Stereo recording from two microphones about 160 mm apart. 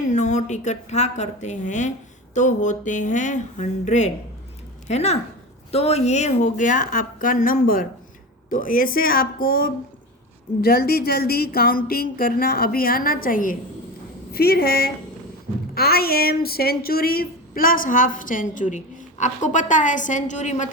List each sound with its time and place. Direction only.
0.1 s a woman's voice: 50° left (ahead or behind)
14.3 s speech: 80° left; by 20.7 s 50° left (ahead or behind)